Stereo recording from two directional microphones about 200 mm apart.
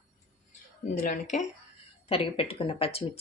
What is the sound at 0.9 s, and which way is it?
Speech, 40° left (ahead or behind).